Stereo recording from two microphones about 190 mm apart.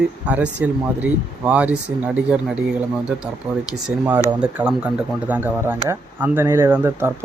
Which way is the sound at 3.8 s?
10° right (ahead or behind).